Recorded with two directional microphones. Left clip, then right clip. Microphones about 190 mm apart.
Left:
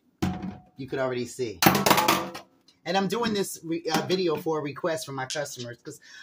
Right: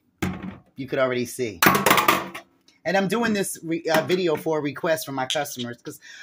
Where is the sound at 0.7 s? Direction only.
40° right (ahead or behind).